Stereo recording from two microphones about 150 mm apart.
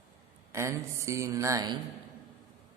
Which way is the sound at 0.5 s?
20° right (ahead or behind).